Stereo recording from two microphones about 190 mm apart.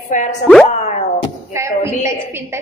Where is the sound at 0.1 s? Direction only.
40° left (ahead or behind).